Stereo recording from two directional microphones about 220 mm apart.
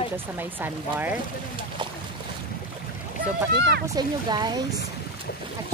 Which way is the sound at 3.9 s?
20° right (ahead or behind).